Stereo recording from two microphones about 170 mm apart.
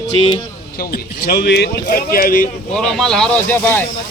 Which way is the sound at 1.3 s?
70° left (ahead or behind).